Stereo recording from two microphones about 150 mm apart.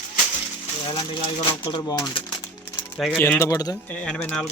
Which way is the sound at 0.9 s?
30° left (ahead or behind).